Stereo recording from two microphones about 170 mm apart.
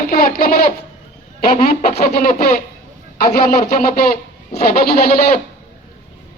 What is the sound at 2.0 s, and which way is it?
Speech, 65° left (ahead or behind).